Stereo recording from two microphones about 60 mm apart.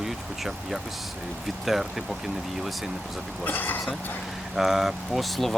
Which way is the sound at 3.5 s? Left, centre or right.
Left.